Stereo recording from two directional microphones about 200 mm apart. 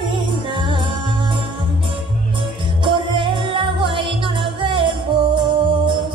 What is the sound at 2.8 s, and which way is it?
Music, 25° right (ahead or behind).